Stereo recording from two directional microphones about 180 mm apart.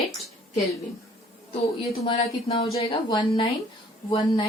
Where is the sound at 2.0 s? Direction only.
35° left (ahead or behind).